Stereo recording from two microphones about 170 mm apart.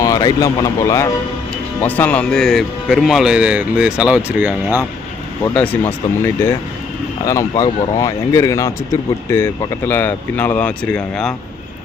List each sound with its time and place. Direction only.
0.0 s speech: 20° left (ahead or behind); by 4.9 s 10° right (ahead or behind)
5.5 s speech: 10° left (ahead or behind)